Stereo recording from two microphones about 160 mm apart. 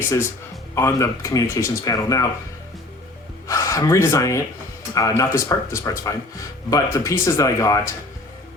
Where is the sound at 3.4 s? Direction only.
20° left (ahead or behind).